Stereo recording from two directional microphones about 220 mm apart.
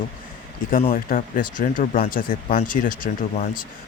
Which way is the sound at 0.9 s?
40° left (ahead or behind).